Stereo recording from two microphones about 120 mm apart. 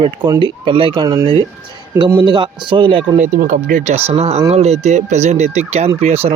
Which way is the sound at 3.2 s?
90° right.